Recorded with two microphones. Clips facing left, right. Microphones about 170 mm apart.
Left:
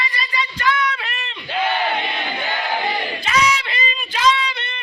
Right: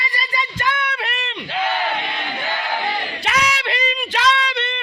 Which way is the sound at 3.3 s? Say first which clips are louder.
Left 2 dB; 70° right (ahead or behind).